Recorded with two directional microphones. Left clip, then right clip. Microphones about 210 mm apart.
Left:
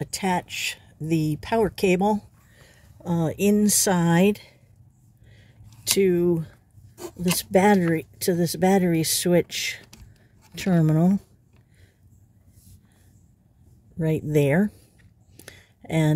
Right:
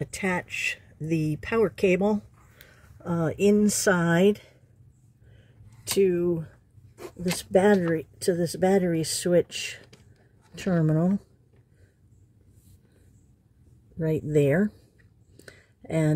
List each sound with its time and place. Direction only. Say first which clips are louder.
0.0 s speech: left 3 dB; 15° left (ahead or behind)
5.9 s speech: left 2 dB; 30° left (ahead or behind)
10.7 s speech: left 2 dB; 40° left (ahead or behind)
13.9 s speech: left 1 dB; 30° left (ahead or behind)
15.3 s a sound: left 3 dB; 25° left (ahead or behind)